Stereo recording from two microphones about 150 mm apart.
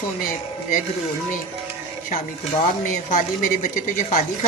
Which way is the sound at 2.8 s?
55° left (ahead or behind).